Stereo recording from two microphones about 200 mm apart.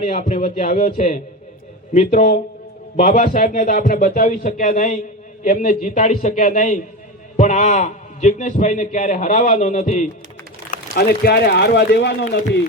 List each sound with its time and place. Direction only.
0.1 s a man's voice: 35° left (ahead or behind)
10.9 s speech: 50° left (ahead or behind)